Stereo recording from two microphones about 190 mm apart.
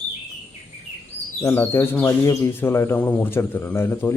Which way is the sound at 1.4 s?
10° left (ahead or behind).